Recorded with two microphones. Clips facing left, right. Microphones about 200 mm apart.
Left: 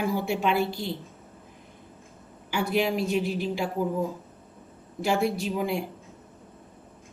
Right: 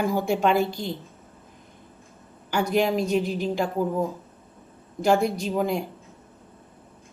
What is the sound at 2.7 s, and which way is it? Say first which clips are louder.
Speech: right 3 dB; 45° right (ahead or behind).